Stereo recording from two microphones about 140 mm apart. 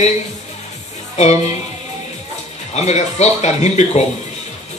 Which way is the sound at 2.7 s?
50° left (ahead or behind).